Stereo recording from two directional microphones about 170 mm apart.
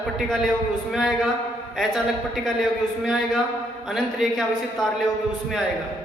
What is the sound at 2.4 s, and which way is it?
A man's voice, centre (ahead or behind).